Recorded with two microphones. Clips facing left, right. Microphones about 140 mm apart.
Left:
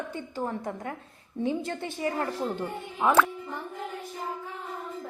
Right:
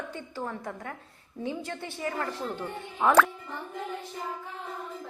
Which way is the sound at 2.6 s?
5° left (ahead or behind).